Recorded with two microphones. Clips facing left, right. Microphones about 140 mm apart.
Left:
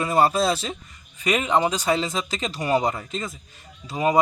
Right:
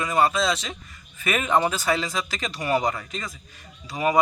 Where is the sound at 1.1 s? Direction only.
15° left (ahead or behind).